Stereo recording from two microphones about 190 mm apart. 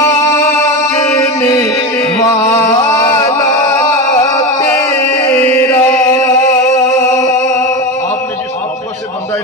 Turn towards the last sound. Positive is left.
turn(degrees=15)  # may be behind; listen again after turning